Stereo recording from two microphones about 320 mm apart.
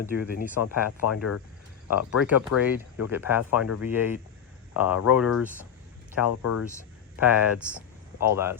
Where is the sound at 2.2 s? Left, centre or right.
Centre.